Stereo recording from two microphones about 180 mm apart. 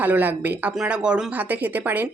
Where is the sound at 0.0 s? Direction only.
10° right (ahead or behind).